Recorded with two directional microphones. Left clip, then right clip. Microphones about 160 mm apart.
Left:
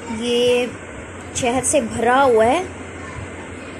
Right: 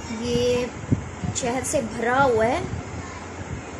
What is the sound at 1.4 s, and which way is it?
A woman's voice, 25° left (ahead or behind).